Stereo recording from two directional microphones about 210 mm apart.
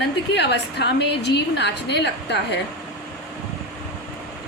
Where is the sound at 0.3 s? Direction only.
55° left (ahead or behind).